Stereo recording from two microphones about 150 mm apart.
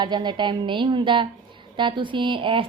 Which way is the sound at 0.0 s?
30° right (ahead or behind).